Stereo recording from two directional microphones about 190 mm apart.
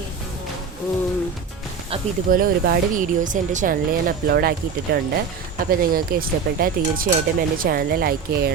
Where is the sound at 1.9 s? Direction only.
30° right (ahead or behind).